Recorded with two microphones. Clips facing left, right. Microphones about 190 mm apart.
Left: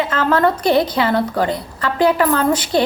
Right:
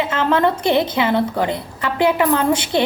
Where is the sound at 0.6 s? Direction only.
25° right (ahead or behind).